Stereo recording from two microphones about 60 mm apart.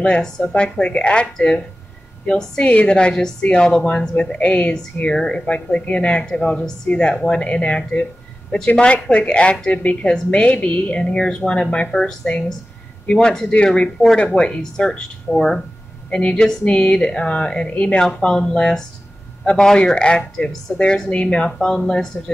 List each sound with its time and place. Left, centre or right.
0.0 s speech: centre
16.1 s speech: centre